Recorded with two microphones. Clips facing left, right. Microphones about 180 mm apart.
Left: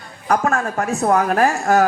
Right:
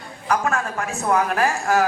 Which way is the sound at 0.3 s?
40° left (ahead or behind).